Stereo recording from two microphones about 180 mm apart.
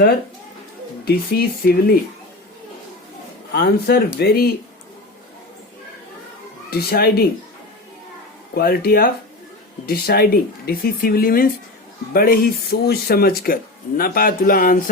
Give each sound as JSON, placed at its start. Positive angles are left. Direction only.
{"t": 1.0, "sound": "speech", "side_deg": 55}
{"t": 3.5, "sound": "speech", "side_deg": 60}
{"t": 6.7, "sound": "speech", "side_deg": 60}
{"t": 8.5, "sound": "speech", "side_deg": 60}